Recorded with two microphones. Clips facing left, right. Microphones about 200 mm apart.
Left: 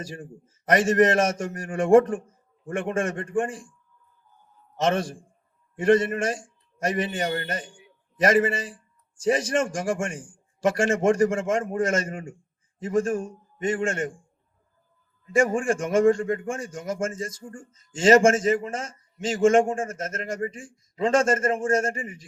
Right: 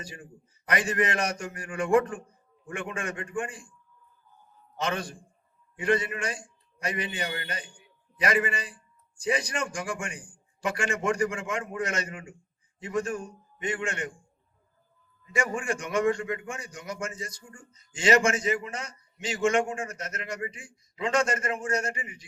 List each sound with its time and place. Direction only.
0.7 s a man's voice: 45° left (ahead or behind)
4.8 s a man's voice: 45° left (ahead or behind)
15.3 s a man's voice: 50° left (ahead or behind)